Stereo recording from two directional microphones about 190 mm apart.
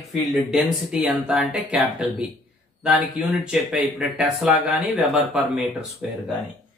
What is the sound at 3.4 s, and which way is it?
Speech, 5° right (ahead or behind).